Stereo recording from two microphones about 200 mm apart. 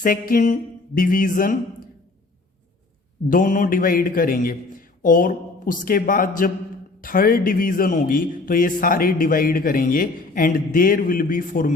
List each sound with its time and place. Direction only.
0.0 s speech: 45° left (ahead or behind)
3.2 s speech: 40° left (ahead or behind)